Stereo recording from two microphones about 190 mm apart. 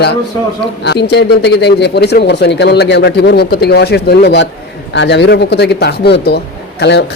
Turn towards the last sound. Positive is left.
turn(degrees=65)  # may be behind; listen again after turning